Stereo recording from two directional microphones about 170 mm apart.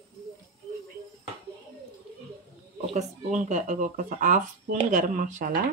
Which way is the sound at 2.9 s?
45° right (ahead or behind).